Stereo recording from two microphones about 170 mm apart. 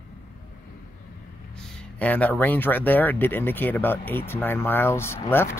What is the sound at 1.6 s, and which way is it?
Speech, 5° left (ahead or behind).